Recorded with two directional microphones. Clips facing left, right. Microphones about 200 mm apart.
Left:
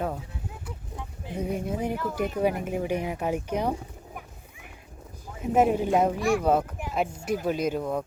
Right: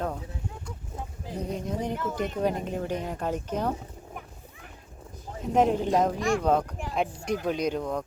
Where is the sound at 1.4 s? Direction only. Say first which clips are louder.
Left 2 dB; 10° left (ahead or behind).